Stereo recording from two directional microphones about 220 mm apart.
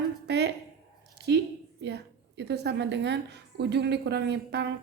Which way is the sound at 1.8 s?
50° right (ahead or behind).